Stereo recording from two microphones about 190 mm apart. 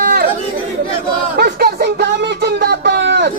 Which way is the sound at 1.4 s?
60° right (ahead or behind).